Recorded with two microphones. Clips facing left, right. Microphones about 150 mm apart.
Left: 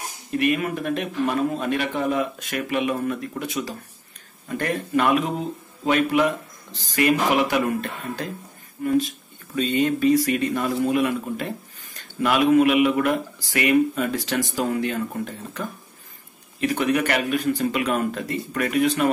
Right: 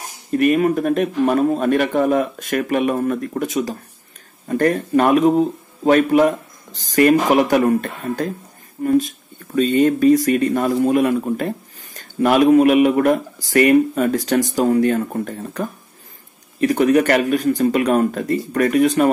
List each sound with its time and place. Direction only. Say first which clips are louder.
0.3 s speech: right 7 dB; 40° right (ahead or behind)